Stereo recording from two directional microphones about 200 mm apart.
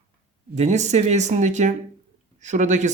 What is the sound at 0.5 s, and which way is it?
Speech, 35° right (ahead or behind).